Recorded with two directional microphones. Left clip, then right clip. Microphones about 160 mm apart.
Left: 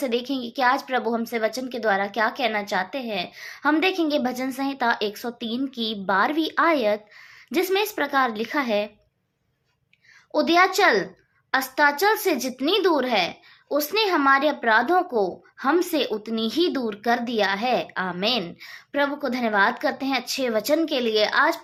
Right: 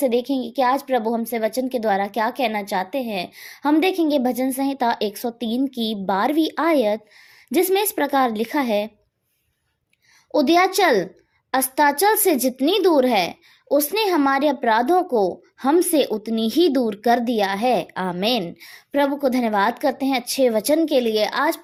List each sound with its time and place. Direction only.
0.0 s a woman's voice: 40° right (ahead or behind)
10.3 s a woman's voice: 50° right (ahead or behind)